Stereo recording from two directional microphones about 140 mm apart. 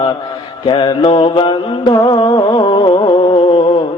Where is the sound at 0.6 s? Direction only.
35° left (ahead or behind).